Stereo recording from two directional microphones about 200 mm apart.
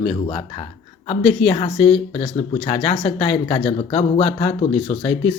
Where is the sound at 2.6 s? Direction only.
30° left (ahead or behind).